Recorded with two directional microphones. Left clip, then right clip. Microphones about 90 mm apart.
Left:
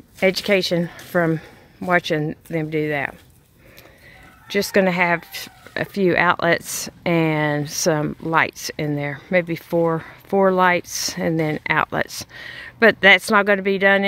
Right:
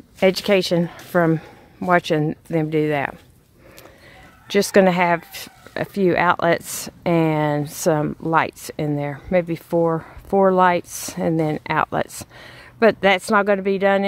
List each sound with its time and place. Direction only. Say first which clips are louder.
0.2 s speech: right 1 dB; 25° right (ahead or behind); by 3.2 s 45° right (ahead or behind)
4.5 s speech: right 3 dB; 60° right (ahead or behind)
4.8 s speech: right 1 dB; 20° right (ahead or behind)
5.7 s speech: even; 5° right (ahead or behind)
10.5 s speech: right 1 dB; 10° right (ahead or behind)